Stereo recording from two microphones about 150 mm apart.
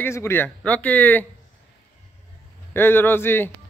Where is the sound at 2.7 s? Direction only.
15° left (ahead or behind).